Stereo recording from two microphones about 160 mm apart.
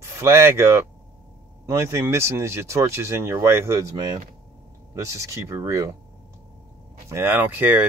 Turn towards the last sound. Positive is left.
turn(degrees=-15)  # may be behind; listen again after turning